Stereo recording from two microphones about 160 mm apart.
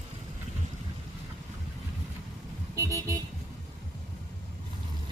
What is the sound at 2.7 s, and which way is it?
Vehicle, 20° right (ahead or behind).